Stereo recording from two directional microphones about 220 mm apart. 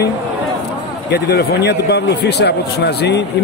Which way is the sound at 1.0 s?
45° left (ahead or behind).